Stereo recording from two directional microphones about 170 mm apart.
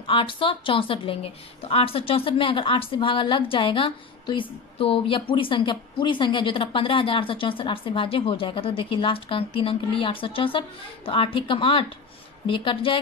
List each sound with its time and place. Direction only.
0.0 s a woman's voice: 30° left (ahead or behind)